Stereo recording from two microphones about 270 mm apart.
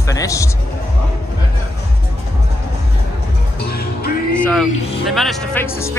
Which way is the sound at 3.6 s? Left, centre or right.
Left.